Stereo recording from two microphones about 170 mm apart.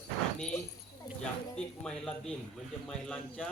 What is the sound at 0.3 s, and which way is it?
Dog, 5° left (ahead or behind).